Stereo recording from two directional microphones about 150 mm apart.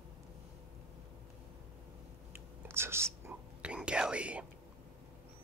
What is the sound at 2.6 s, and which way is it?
Whispering, 15° right (ahead or behind).